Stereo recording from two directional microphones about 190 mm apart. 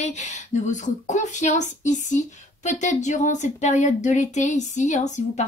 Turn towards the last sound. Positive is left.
turn(degrees=40)  # may be behind; listen again after turning